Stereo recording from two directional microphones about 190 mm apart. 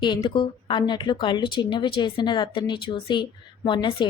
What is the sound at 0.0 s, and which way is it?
A woman's voice, 25° left (ahead or behind).